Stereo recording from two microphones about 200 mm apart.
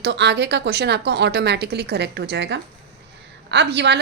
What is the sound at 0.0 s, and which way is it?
A woman's voice, 60° right (ahead or behind).